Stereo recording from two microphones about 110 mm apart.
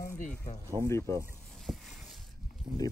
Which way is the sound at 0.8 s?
45° right (ahead or behind).